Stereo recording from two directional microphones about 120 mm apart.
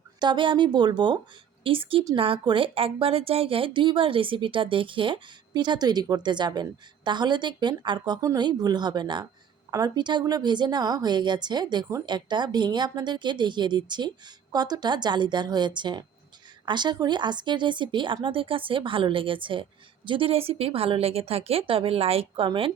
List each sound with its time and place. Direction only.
0.2 s speech: 40° right (ahead or behind)